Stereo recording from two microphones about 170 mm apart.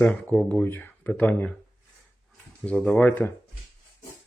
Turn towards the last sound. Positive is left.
turn(degrees=10)  # may be behind; listen again after turning